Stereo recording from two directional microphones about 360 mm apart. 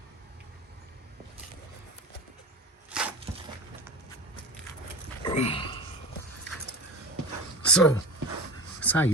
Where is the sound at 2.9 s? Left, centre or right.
Centre.